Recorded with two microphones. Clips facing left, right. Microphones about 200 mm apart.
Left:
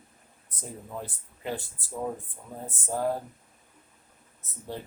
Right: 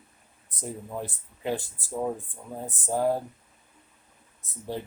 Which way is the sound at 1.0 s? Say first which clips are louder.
Right 7 dB; 15° right (ahead or behind).